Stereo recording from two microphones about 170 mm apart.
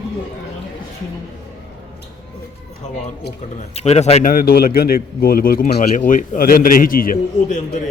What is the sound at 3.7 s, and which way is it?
Speech, 40° left (ahead or behind).